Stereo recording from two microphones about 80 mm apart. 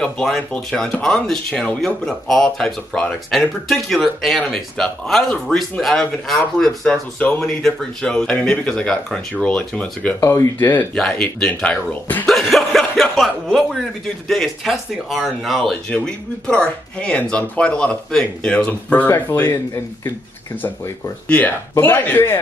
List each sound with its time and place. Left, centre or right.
0.0 s speech: centre
10.2 s speech: left
11.0 s speech: centre
12.3 s speech: centre
15.9 s speech: centre
18.7 s speech: left
21.3 s speech: left